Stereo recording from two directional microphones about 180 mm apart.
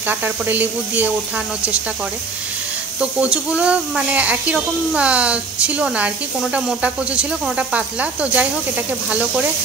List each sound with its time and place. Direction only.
0.0 s speech: 10° right (ahead or behind)
3.0 s speech: 5° right (ahead or behind)